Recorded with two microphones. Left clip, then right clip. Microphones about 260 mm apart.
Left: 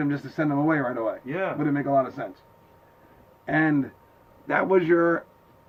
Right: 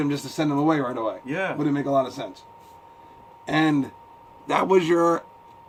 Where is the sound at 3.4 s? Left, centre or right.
Centre.